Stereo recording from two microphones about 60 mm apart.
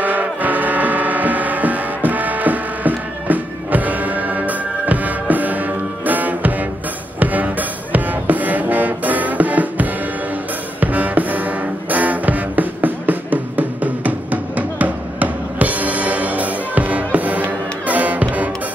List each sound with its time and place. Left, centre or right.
0.0 s music: right